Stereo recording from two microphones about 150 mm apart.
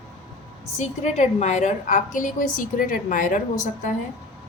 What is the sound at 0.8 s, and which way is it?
A woman's voice, 50° left (ahead or behind).